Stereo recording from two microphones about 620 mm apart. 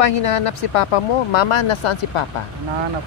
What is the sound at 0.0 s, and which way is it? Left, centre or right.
Speech, left.